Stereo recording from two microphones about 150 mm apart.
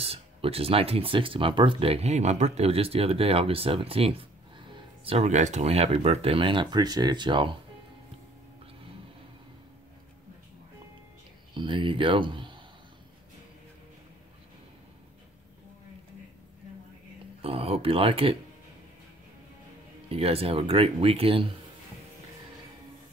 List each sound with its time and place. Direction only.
0.0 s speech: 40° right (ahead or behind)
11.5 s speech: 35° right (ahead or behind)
17.4 s speech: 40° right (ahead or behind)
20.1 s speech: 40° right (ahead or behind)